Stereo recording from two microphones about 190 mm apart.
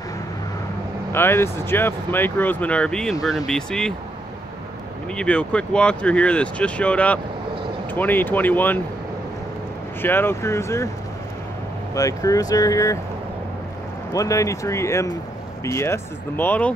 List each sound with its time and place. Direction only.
1.1 s speech: 10° left (ahead or behind)
5.1 s speech: 5° left (ahead or behind)
10.0 s speech: 10° left (ahead or behind)
11.9 s speech: 15° left (ahead or behind)
14.1 s speech: 15° left (ahead or behind)